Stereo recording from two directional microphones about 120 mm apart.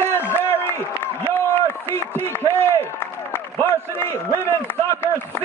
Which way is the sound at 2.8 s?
20° left (ahead or behind).